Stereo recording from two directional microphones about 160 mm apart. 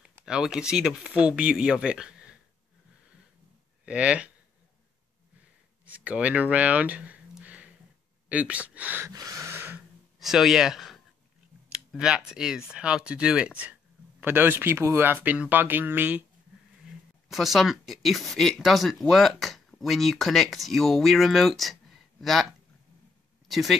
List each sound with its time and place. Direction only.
0.0 s speech: 5° right (ahead or behind)
3.8 s speech: 5° right (ahead or behind)
5.9 s speech: 10° right (ahead or behind)
9.1 s snort: 20° right (ahead or behind)
10.1 s speech: centre (ahead or behind)
17.3 s speech: centre (ahead or behind)
23.5 s speech: centre (ahead or behind)